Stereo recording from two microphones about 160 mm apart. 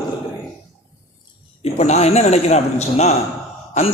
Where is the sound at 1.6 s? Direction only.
40° left (ahead or behind).